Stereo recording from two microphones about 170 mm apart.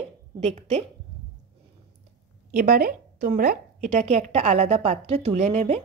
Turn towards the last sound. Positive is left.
turn(degrees=-40)  # may be behind; listen again after turning